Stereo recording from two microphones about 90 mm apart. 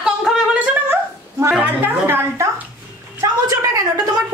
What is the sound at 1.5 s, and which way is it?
A woman's voice, 20° right (ahead or behind).